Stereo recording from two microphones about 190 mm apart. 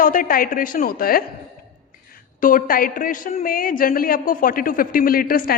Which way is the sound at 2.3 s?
45° left (ahead or behind).